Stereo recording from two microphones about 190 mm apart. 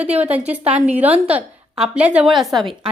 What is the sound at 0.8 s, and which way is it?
A woman's voice, 10° right (ahead or behind).